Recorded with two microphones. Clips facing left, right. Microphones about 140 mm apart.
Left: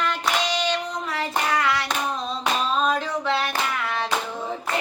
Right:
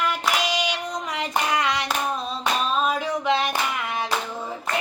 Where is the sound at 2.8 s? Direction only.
5° right (ahead or behind).